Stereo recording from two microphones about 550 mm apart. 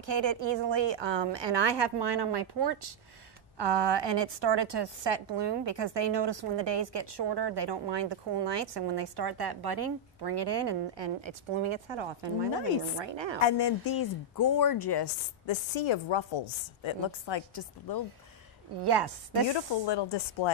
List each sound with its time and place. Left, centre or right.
0.0 s a woman's voice: right
13.4 s speech: left
18.8 s a woman's voice: right
19.5 s speech: left